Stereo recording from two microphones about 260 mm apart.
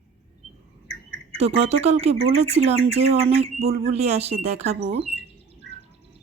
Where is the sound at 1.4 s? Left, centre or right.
Right.